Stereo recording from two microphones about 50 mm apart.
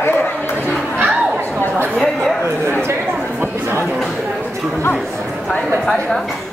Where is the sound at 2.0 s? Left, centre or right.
Centre.